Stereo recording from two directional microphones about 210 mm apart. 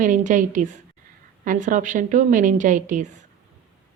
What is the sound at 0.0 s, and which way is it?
A woman's voice, 35° right (ahead or behind).